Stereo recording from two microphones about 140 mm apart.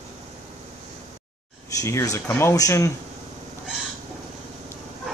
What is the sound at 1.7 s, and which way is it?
Speech, 20° left (ahead or behind).